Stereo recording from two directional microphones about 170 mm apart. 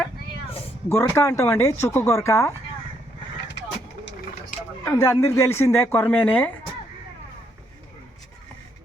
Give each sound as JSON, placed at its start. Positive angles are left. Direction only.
{"t": 0.9, "sound": "speech", "side_deg": 15}
{"t": 3.5, "sound": "vehicle", "side_deg": 90}
{"t": 4.9, "sound": "speech", "side_deg": 15}